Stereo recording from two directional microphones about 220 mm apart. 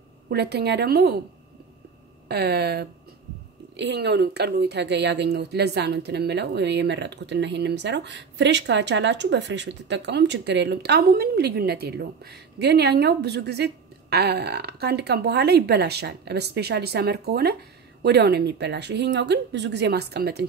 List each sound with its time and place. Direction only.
0.3 s speech: 50° right (ahead or behind)
2.2 s speech: 45° right (ahead or behind)